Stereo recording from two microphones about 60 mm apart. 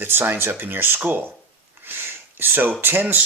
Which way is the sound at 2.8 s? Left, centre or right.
Right.